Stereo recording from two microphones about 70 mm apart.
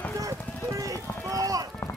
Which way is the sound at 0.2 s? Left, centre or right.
Right.